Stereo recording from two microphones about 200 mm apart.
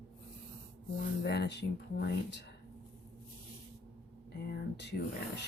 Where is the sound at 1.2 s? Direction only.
60° left (ahead or behind).